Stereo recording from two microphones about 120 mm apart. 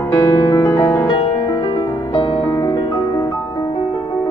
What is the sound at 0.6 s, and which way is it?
Music, 30° left (ahead or behind).